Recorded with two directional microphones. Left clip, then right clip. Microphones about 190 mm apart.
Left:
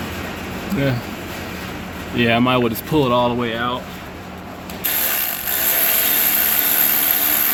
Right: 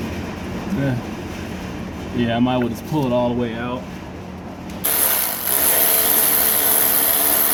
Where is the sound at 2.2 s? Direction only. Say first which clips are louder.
Left 4 dB; 25° left (ahead or behind).